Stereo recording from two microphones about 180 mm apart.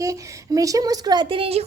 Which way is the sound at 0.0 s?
20° right (ahead or behind).